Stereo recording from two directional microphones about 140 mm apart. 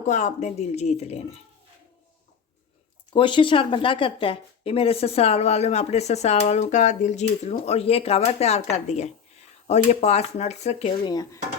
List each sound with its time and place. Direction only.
0.1 s speech: 60° left (ahead or behind)
3.1 s speech: 35° left (ahead or behind); by 10.9 s 50° left (ahead or behind)
11.0 s speech: 25° left (ahead or behind)